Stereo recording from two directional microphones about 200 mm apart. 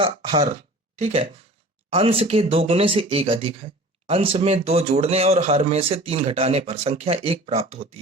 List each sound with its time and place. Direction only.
0.0 s speech: 30° right (ahead or behind)